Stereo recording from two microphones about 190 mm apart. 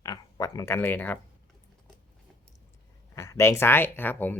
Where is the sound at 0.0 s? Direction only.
20° left (ahead or behind).